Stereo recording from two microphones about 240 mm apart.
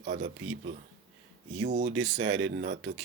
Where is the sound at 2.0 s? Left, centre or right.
Right.